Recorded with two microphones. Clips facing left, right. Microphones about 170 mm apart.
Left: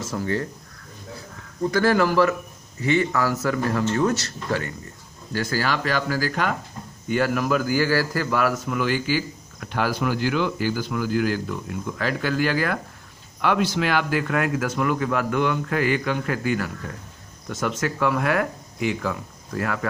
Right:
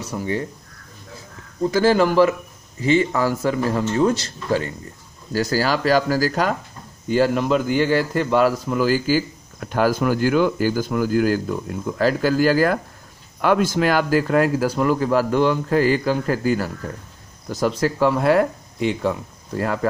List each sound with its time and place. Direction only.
0.1 s speech: 15° right (ahead or behind)
1.7 s a man's voice: 25° right (ahead or behind)